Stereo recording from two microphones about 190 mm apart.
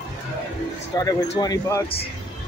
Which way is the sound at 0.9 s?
20° left (ahead or behind).